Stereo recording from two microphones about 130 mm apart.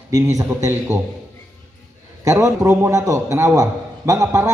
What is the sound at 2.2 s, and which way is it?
A man's voice, 25° right (ahead or behind).